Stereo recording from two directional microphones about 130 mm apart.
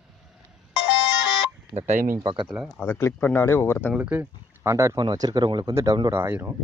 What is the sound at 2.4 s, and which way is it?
Speech, centre (ahead or behind).